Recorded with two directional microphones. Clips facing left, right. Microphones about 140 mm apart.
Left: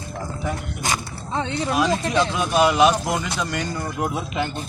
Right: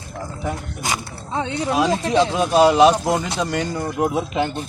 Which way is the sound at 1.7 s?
30° right (ahead or behind).